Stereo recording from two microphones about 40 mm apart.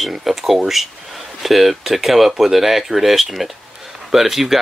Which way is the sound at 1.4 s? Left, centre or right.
Centre.